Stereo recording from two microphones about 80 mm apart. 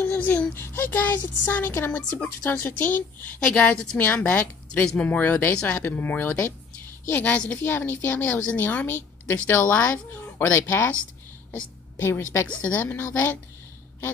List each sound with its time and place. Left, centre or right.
0.0 s a sound: left
0.6 s a woman's voice: left
3.5 s a woman's voice: centre
4.0 s a woman's voice: left
12.0 s a woman's voice: left